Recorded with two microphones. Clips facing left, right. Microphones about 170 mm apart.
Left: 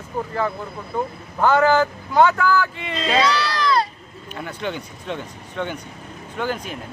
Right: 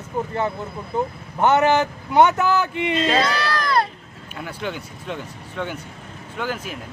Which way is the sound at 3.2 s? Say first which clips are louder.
Left 2 dB; 50° right (ahead or behind).